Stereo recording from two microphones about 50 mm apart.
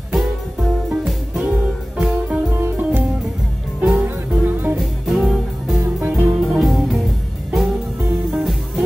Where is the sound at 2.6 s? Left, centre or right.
Right.